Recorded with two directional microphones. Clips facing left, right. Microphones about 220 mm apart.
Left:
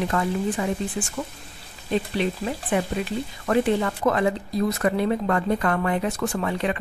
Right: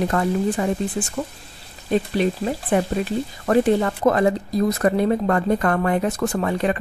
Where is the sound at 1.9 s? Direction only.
45° right (ahead or behind).